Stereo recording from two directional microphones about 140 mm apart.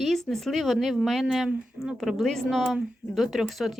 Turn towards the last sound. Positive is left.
turn(degrees=0)  # may be behind; listen again after turning